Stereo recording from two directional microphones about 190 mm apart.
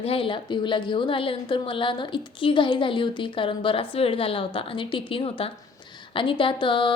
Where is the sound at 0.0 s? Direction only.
30° left (ahead or behind).